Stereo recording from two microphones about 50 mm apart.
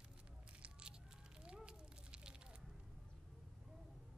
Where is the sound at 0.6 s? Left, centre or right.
Centre.